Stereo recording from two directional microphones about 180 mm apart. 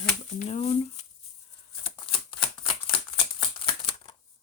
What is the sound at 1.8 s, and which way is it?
Shuffling cards, 30° left (ahead or behind).